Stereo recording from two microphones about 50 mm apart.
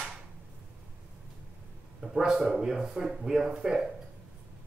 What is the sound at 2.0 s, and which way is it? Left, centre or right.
Speech, centre.